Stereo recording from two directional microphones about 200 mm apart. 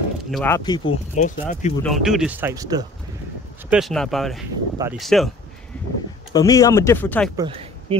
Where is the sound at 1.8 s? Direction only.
Centre (ahead or behind); by 2.9 s 20° right (ahead or behind).